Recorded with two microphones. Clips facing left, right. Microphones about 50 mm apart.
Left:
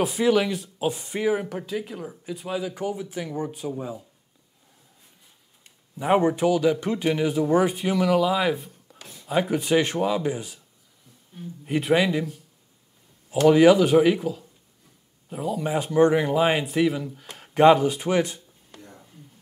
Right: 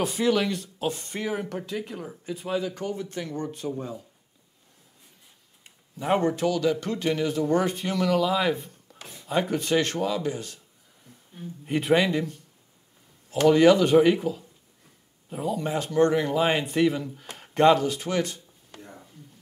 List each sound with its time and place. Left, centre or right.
0.0 s speech: centre
5.9 s a man's voice: centre
11.6 s speech: centre
13.5 s speech: centre
17.6 s a man's voice: centre
18.8 s whispering: centre